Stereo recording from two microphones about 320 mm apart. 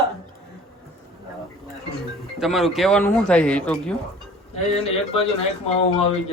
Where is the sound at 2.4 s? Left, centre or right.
Centre.